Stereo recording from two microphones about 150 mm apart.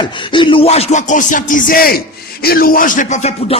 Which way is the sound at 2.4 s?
85° left.